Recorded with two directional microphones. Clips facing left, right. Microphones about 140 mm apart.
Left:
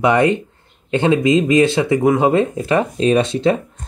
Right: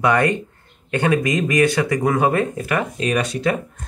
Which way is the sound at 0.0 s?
20° left (ahead or behind).